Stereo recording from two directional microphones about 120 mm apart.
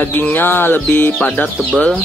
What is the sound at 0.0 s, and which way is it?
Music, 15° left (ahead or behind).